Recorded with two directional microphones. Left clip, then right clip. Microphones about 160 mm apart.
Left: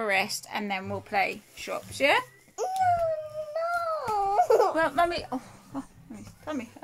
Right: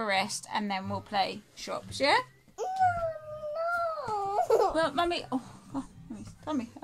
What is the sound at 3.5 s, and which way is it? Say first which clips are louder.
Child singing: left 1 dB; 25° left (ahead or behind).